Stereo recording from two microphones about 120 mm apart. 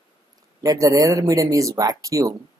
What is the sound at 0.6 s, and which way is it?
Speech, 30° right (ahead or behind).